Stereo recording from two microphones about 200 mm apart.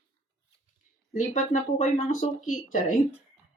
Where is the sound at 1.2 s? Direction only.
35° left (ahead or behind).